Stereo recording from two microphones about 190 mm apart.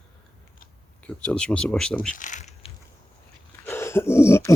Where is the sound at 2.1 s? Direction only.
40° left (ahead or behind).